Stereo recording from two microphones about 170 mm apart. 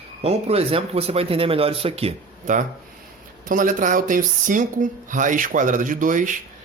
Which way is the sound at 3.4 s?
50° right (ahead or behind).